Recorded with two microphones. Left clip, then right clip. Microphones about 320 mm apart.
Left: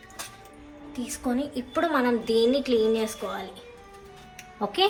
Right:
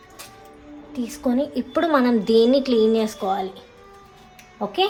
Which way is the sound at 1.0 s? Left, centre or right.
Right.